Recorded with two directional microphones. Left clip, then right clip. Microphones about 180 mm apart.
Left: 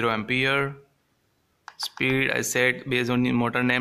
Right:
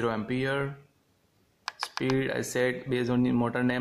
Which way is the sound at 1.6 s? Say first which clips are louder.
Left 5 dB; 30° right (ahead or behind).